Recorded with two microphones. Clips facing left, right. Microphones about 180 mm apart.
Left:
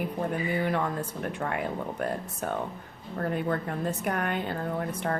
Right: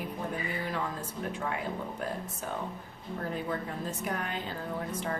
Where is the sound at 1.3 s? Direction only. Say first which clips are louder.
Left 2 dB; 60° left (ahead or behind).